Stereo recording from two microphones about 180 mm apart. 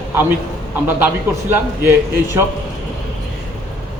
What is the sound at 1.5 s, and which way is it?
Speech, 15° right (ahead or behind).